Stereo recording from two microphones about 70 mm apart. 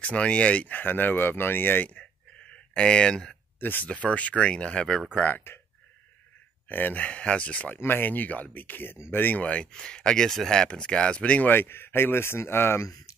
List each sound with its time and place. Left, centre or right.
0.0 s speech: centre
3.5 s speech: left; by 5.0 s centre
5.1 s speech: left
6.7 s speech: left
11.5 s speech: left